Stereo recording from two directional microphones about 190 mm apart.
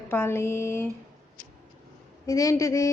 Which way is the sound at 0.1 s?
15° left (ahead or behind).